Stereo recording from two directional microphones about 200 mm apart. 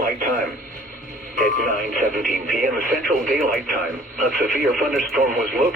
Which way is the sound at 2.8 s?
45° right (ahead or behind).